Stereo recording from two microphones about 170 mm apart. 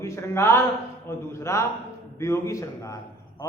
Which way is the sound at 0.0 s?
15° left (ahead or behind).